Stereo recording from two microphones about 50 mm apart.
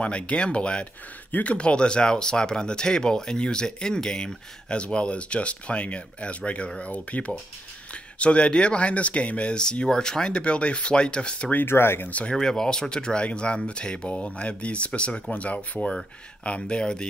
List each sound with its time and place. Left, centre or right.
0.0 s speech: left
11.6 s speech: left
12.1 s speech: left
12.4 s speech: centre